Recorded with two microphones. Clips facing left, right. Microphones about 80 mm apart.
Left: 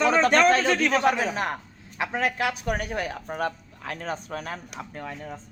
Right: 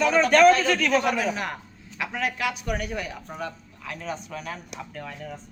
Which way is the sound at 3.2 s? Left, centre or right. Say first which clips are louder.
Left 5 dB; left.